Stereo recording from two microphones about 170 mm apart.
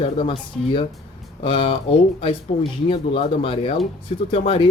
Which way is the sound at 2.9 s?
30° left (ahead or behind).